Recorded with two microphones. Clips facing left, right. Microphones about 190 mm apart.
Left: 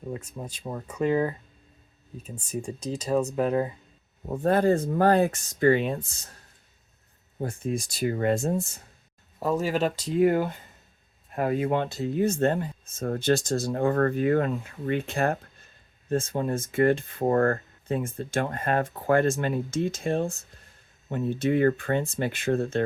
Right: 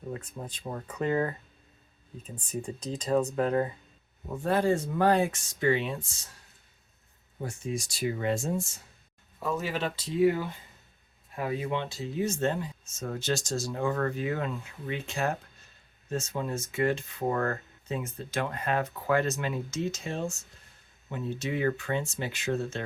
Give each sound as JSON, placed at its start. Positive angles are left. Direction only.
{"t": 0.2, "sound": "speech", "side_deg": 10}
{"t": 4.4, "sound": "speech", "side_deg": 55}
{"t": 7.3, "sound": "speech", "side_deg": 55}
{"t": 9.4, "sound": "speech", "side_deg": 40}